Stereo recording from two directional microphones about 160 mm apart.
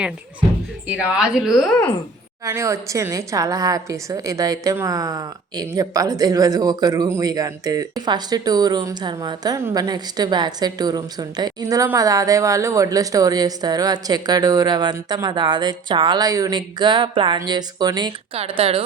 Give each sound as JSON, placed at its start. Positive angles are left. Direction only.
{"t": 0.9, "sound": "speech", "side_deg": -5}
{"t": 2.4, "sound": "a woman's voice", "side_deg": -20}
{"t": 18.3, "sound": "speech", "side_deg": -35}